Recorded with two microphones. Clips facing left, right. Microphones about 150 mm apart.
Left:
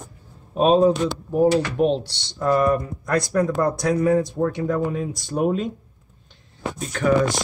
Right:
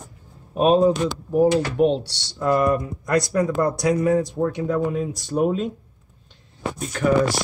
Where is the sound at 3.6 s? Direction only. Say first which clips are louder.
Even; 5° right (ahead or behind).